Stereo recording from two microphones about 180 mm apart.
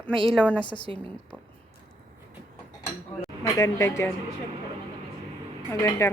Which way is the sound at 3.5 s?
15° left (ahead or behind).